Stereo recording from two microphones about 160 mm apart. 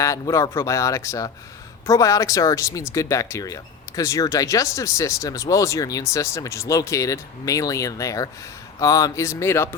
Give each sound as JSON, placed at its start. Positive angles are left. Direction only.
{"t": 0.0, "sound": "speech", "side_deg": 20}